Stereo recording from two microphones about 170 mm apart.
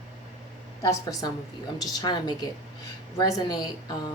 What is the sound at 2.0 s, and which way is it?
Speech, 25° left (ahead or behind).